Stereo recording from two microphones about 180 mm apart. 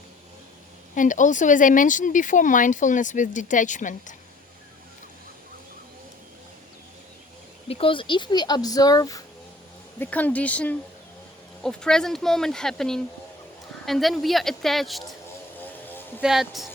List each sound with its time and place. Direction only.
0.9 s speech: 45° left (ahead or behind)
7.7 s speech: 30° left (ahead or behind)
10.0 s speech: 10° left (ahead or behind)
16.2 s speech: centre (ahead or behind)